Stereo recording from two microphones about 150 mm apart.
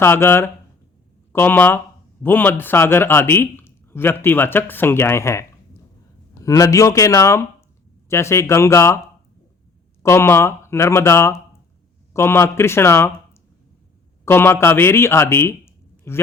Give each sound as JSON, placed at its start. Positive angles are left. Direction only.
{"t": 0.0, "sound": "a man's voice", "side_deg": 15}
{"t": 10.0, "sound": "a man's voice", "side_deg": 20}
{"t": 14.3, "sound": "speech", "side_deg": 15}